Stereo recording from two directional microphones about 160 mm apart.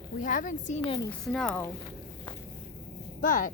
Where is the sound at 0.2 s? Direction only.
55° left (ahead or behind).